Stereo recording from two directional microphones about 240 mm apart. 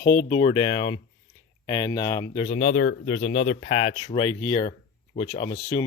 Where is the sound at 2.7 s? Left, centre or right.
Left.